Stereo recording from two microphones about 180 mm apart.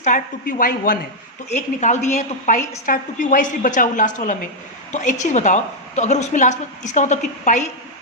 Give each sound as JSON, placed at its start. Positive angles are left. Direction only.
{"t": 0.0, "sound": "a woman's voice", "side_deg": 50}